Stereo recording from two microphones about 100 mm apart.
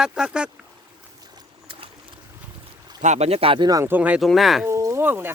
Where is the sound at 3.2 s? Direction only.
90° right.